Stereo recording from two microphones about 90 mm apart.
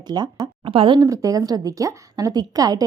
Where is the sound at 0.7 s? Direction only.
75° right (ahead or behind).